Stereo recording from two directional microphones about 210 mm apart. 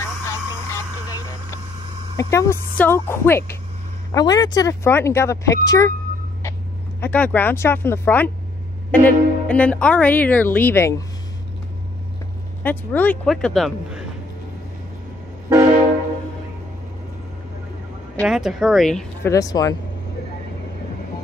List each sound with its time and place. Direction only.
0.0 s a sound: 15° left (ahead or behind)
2.1 s speech: 15° left (ahead or behind)
7.0 s speech: 10° left (ahead or behind)
12.6 s speech: 10° left (ahead or behind)
18.2 s speech: centre (ahead or behind)
19.3 s speech: 15° left (ahead or behind)